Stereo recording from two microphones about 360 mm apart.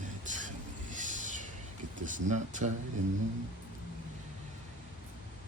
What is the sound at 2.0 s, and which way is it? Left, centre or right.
Speech, right.